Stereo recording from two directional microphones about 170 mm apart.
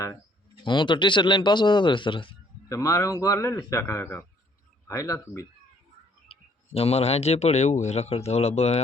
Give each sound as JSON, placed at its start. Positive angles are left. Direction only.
{"t": 0.6, "sound": "speech", "side_deg": 25}
{"t": 2.6, "sound": "a man's voice", "side_deg": 20}
{"t": 6.2, "sound": "speech", "side_deg": 35}